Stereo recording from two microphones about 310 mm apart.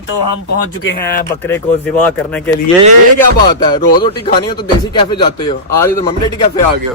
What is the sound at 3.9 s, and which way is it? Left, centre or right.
Speech, left.